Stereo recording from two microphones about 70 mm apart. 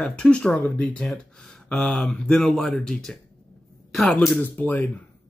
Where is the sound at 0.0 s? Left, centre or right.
Centre.